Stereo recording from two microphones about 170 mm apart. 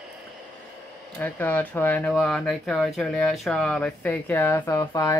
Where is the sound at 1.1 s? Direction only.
10° left (ahead or behind).